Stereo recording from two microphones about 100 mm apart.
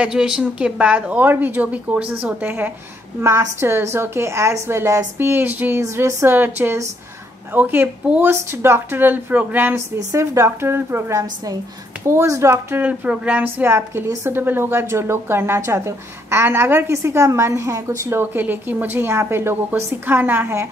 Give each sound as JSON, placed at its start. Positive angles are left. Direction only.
{"t": 0.0, "sound": "a woman's voice", "side_deg": -5}
{"t": 3.2, "sound": "a woman's voice", "side_deg": -30}
{"t": 9.9, "sound": "a woman's voice", "side_deg": -30}